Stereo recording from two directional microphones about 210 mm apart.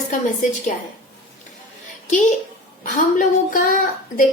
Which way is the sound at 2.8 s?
40° left (ahead or behind).